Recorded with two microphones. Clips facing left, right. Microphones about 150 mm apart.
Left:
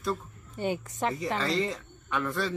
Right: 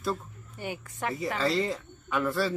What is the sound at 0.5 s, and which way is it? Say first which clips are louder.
Speech: left 6 dB; 25° left (ahead or behind).